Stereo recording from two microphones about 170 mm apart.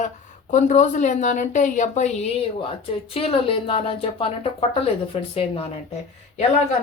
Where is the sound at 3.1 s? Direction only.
35° left (ahead or behind).